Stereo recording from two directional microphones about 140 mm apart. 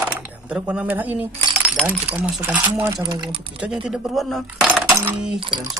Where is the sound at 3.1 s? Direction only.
35° right (ahead or behind).